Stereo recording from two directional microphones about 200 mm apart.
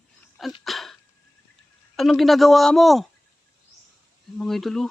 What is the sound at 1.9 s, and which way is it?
A man's voice, centre (ahead or behind).